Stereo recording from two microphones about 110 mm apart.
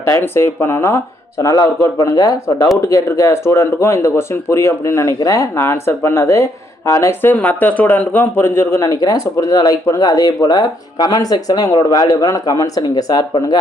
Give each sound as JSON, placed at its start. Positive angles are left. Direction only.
{"t": 0.0, "sound": "speech", "side_deg": 25}